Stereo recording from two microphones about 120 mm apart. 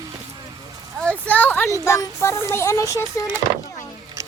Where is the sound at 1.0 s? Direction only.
15° left (ahead or behind).